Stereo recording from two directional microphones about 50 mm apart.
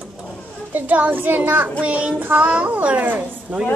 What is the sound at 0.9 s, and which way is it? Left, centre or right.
Speech, right.